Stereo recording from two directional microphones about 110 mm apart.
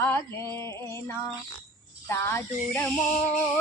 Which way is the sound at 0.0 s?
20° left (ahead or behind).